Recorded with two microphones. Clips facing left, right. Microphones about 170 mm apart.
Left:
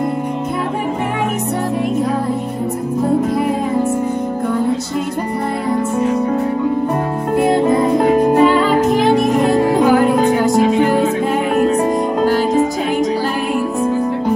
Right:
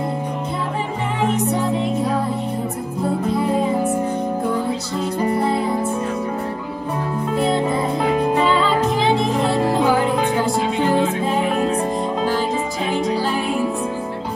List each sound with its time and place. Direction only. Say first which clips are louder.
8.0 s music: left 5 dB; 45° left (ahead or behind)
9.4 s music: left 5 dB; 60° left (ahead or behind)
12.2 s music: left 9 dB; 50° left (ahead or behind)